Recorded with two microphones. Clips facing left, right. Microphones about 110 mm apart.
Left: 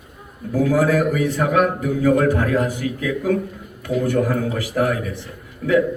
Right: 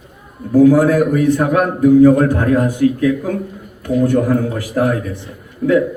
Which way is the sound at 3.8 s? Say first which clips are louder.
Right 5 dB; 20° right (ahead or behind).